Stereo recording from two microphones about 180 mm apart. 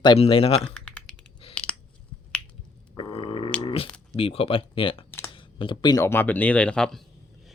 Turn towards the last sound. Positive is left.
turn(degrees=5)  # may be behind; listen again after turning